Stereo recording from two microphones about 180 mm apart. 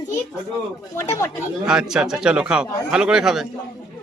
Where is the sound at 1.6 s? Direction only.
5° right (ahead or behind).